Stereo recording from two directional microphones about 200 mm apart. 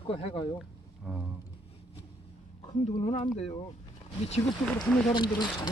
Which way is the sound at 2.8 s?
35° left (ahead or behind).